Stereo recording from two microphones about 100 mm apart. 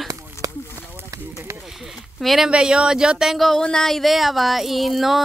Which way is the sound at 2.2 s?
Centre (ahead or behind).